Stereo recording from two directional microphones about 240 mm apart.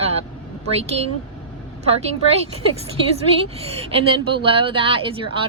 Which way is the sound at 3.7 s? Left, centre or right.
Right.